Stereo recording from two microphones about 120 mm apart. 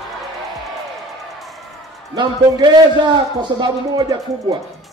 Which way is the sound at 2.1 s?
40° right (ahead or behind).